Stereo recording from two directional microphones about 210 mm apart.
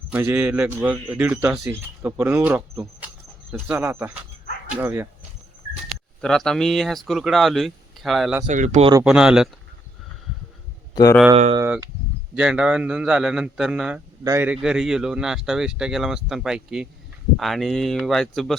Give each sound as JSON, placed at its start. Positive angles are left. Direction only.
{"t": 0.1, "sound": "speech", "side_deg": -10}
{"t": 5.9, "sound": "speech", "side_deg": 0}
{"t": 8.4, "sound": "speech", "side_deg": -35}
{"t": 9.0, "sound": "speech", "side_deg": -5}
{"t": 10.9, "sound": "speech", "side_deg": 15}
{"t": 11.5, "sound": "speech", "side_deg": -15}
{"t": 12.3, "sound": "speech", "side_deg": -5}